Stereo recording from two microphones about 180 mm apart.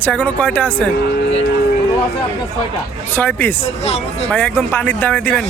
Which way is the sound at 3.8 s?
35° left (ahead or behind).